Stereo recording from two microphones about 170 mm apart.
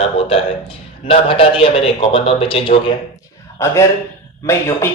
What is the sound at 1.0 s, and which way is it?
A man's voice, 35° left (ahead or behind).